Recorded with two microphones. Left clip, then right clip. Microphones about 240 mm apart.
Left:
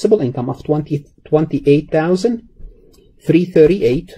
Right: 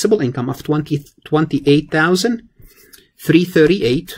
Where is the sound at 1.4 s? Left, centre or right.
Centre.